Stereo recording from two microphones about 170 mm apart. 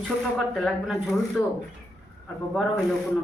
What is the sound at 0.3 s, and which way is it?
Speech, centre (ahead or behind).